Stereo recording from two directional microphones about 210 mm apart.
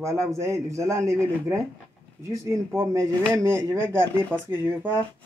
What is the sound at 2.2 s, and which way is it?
Speech, 15° right (ahead or behind).